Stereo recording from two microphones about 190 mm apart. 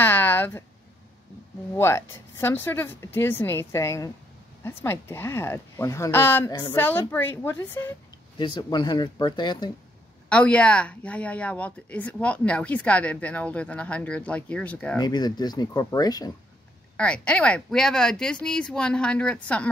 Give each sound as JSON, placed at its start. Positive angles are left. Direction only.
{"t": 0.0, "sound": "a sound", "side_deg": 10}
{"t": 1.8, "sound": "speech", "side_deg": 15}
{"t": 8.5, "sound": "speech", "side_deg": 25}
{"t": 10.3, "sound": "speech", "side_deg": 5}
{"t": 15.0, "sound": "speech", "side_deg": 20}
{"t": 16.9, "sound": "speech", "side_deg": 5}